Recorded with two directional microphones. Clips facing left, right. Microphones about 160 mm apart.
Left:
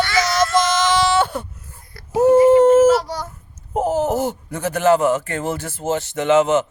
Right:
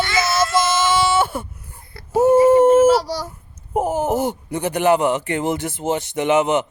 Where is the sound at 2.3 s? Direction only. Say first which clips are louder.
Left 1 dB; 30° right (ahead or behind).